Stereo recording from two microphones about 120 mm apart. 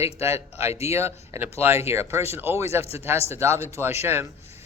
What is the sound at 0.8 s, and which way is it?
A man's voice, 25° right (ahead or behind).